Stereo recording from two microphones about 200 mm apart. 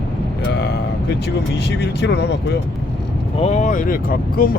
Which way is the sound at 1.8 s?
60° left (ahead or behind).